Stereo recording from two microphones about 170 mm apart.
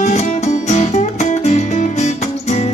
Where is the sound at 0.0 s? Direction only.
40° left (ahead or behind).